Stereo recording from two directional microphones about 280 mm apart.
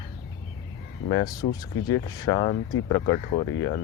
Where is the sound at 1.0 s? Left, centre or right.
Centre.